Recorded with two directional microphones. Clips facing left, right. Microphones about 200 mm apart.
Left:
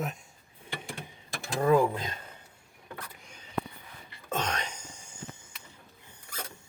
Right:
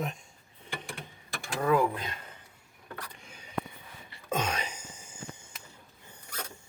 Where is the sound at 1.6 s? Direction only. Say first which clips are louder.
Left 3 dB; 25° left (ahead or behind).